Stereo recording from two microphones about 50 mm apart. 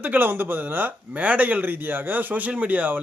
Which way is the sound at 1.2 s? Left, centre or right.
Right.